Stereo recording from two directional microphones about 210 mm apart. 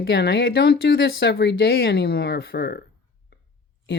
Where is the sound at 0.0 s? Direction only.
50° left (ahead or behind).